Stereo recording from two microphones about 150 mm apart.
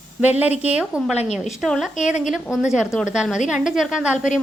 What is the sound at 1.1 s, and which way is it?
Speech, 45° left (ahead or behind).